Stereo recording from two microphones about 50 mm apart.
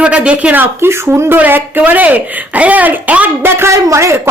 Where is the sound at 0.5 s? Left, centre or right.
Right.